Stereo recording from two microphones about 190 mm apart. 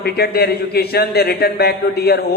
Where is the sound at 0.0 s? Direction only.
55° left (ahead or behind).